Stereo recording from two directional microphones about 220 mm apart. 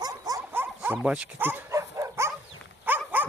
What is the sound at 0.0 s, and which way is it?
Dog, 15° right (ahead or behind).